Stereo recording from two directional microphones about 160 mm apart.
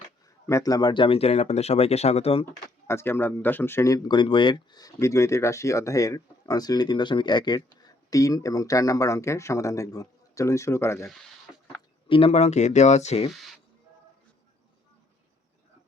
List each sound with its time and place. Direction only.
0.4 s speech: 20° left (ahead or behind); by 2.4 s 40° left (ahead or behind)
2.8 s speech: 15° left (ahead or behind)
12.0 s speech: 35° left (ahead or behind)